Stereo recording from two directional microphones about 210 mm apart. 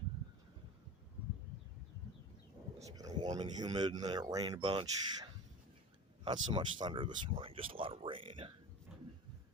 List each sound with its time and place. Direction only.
2.9 s speech: 15° right (ahead or behind)